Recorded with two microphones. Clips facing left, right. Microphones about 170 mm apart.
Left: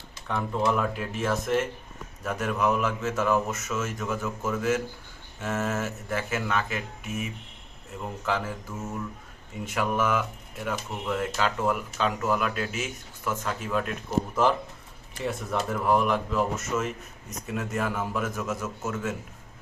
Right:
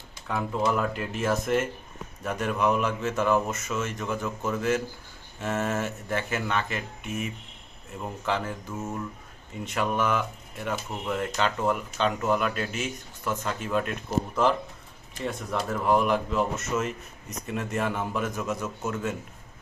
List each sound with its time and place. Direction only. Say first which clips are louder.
0.3 s speech: even; centre (ahead or behind)
9.6 s speech: even; 5° left (ahead or behind)
15.2 s speech: left 1 dB; centre (ahead or behind)